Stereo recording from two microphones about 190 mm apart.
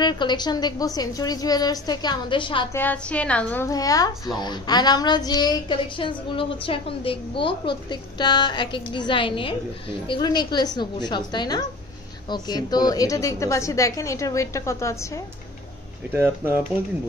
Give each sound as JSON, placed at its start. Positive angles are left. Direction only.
{"t": 0.0, "sound": "a woman's voice", "side_deg": 25}
{"t": 2.7, "sound": "a woman's voice", "side_deg": 10}
{"t": 16.1, "sound": "speech", "side_deg": -10}